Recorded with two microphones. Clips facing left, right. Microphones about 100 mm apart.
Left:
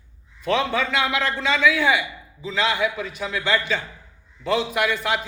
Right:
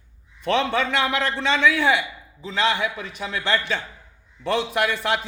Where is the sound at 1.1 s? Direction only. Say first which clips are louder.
Even; 35° right (ahead or behind).